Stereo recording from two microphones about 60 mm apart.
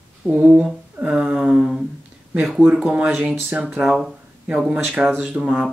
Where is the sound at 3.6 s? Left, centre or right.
Centre.